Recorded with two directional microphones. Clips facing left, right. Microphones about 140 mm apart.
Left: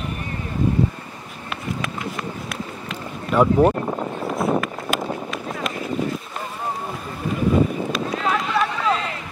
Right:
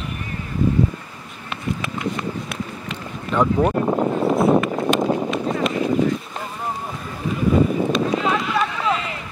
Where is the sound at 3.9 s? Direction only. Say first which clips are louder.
Right 7 dB; 50° right (ahead or behind).